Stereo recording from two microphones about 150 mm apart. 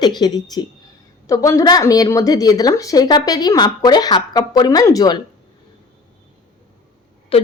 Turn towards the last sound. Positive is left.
turn(degrees=40)  # may be behind; listen again after turning